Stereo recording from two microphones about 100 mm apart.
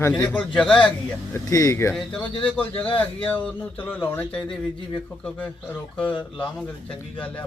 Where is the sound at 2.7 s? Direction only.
65° left (ahead or behind).